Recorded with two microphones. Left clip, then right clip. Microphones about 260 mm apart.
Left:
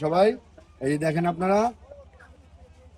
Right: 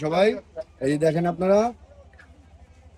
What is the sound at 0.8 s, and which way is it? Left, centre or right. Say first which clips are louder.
Speech: right 3 dB; centre.